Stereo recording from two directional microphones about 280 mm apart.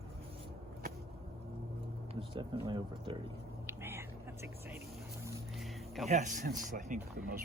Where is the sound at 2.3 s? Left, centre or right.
Centre.